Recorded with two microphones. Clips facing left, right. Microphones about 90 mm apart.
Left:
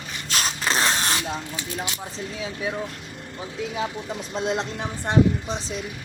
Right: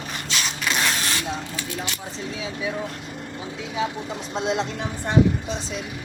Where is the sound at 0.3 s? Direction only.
40° left (ahead or behind).